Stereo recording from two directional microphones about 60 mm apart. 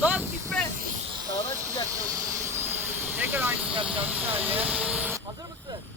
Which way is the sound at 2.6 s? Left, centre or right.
Right.